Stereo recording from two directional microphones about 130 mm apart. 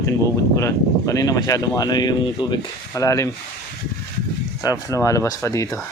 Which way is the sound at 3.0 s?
20° left (ahead or behind).